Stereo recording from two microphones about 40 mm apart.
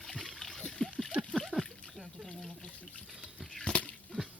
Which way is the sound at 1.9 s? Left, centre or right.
Centre.